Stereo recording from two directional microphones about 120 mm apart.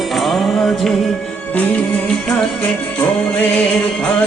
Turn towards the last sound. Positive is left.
turn(degrees=10)  # may be behind; listen again after turning